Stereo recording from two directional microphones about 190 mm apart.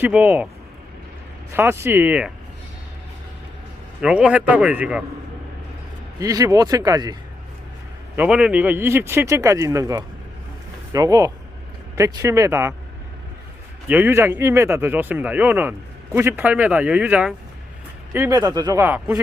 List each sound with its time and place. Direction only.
0.0 s speech: 10° right (ahead or behind)
1.5 s speech: 10° right (ahead or behind)
4.0 s speech: 5° right (ahead or behind)
6.1 s speech: 15° right (ahead or behind)
8.1 s speech: 5° right (ahead or behind)
13.8 s speech: 10° right (ahead or behind)